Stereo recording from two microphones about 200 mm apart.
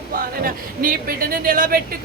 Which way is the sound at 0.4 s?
45° right (ahead or behind).